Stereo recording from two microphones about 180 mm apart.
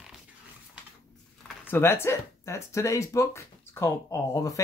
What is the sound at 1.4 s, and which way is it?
Speech, 10° left (ahead or behind).